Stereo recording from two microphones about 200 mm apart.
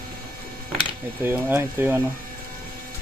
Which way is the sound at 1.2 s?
10° right (ahead or behind).